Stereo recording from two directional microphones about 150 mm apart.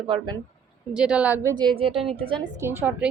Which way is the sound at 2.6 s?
15° right (ahead or behind).